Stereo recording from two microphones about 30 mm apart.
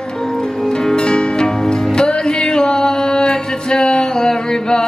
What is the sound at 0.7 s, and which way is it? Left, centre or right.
Music, left.